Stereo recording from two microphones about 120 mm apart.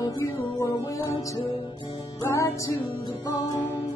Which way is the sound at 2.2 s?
25° left (ahead or behind).